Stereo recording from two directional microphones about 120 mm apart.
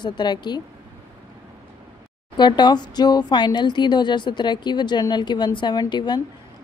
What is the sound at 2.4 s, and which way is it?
Speech, 40° left (ahead or behind).